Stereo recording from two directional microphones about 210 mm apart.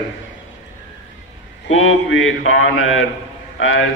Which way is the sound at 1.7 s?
70° left (ahead or behind).